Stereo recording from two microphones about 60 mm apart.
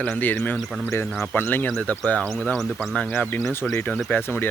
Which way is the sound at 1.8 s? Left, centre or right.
Left.